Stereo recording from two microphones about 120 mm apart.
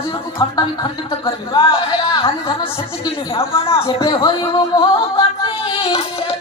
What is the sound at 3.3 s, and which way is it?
Music, 50° left (ahead or behind).